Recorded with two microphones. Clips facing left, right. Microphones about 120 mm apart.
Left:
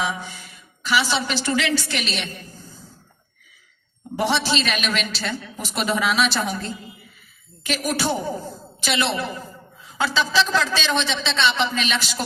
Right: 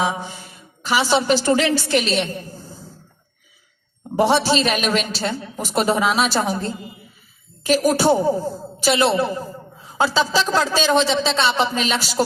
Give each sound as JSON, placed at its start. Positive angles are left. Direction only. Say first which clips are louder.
{"t": 0.0, "sound": "a sound", "louder": "right 4 dB", "side_deg": -45}
{"t": 0.4, "sound": "a woman's voice", "louder": "right 4 dB", "side_deg": -45}
{"t": 4.1, "sound": "a man's voice", "louder": "right 5 dB", "side_deg": -45}
{"t": 7.6, "sound": "a woman's voice", "louder": "right 8 dB", "side_deg": -40}